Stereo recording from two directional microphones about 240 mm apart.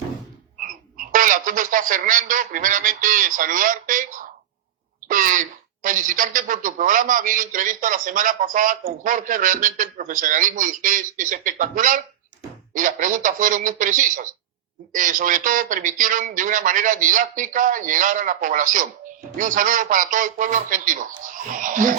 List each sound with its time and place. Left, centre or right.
0.6 s speech: right